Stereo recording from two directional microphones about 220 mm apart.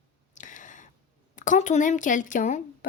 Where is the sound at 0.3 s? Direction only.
35° left (ahead or behind).